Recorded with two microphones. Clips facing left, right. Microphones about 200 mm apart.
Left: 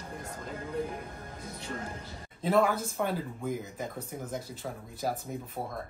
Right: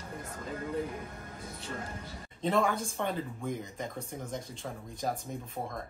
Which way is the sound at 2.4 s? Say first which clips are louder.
Left 3 dB; 5° left (ahead or behind).